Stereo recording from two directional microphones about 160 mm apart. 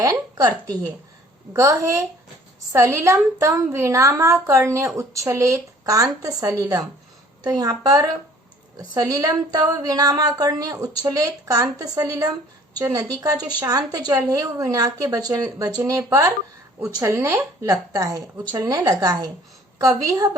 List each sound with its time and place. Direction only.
0.0 s a woman's voice: 20° right (ahead or behind)
1.5 s a woman's voice: 20° right (ahead or behind)